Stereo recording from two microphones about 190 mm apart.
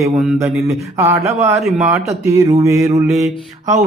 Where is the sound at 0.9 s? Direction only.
15° right (ahead or behind).